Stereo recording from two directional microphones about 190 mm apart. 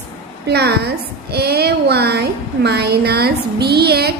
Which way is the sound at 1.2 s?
55° right (ahead or behind).